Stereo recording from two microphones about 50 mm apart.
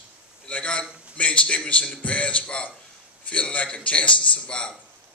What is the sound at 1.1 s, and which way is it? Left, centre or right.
A man's voice, left.